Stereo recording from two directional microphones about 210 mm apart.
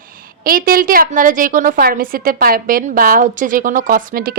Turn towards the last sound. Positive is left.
turn(degrees=-40)  # may be behind; listen again after turning